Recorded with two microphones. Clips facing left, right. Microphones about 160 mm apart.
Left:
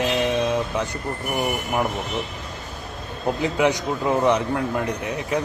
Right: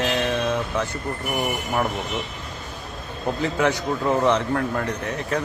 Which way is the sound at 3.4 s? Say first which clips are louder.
Left 1 dB; 15° left (ahead or behind).